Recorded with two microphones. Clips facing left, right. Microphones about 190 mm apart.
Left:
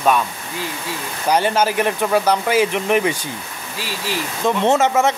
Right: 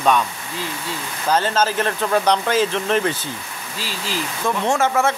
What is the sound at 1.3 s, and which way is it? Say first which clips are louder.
Speech: left 2 dB; 15° left (ahead or behind).